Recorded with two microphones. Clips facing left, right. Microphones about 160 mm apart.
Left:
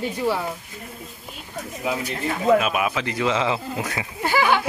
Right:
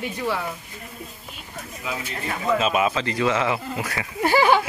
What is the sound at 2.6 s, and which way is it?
Speech, 5° left (ahead or behind).